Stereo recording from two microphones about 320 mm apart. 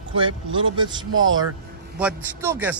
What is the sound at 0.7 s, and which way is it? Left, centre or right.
Speech, centre.